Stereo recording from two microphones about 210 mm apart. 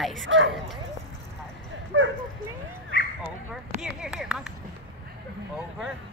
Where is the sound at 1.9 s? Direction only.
60° right (ahead or behind).